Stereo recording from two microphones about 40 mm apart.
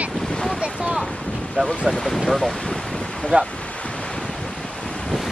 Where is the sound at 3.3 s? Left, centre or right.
Right.